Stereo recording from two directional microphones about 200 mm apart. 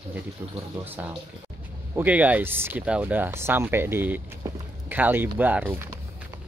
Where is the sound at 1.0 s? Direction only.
10° right (ahead or behind).